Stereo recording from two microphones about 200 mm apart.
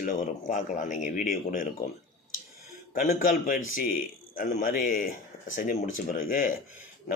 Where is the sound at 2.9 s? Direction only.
40° left (ahead or behind).